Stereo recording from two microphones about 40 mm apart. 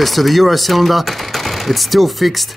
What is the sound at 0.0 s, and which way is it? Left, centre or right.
Speech, centre.